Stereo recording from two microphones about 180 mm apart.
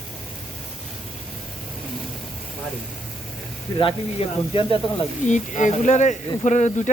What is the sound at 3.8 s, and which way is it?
Speech, 30° left (ahead or behind).